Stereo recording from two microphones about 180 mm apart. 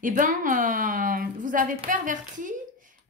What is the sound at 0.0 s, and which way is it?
Speech, 45° right (ahead or behind).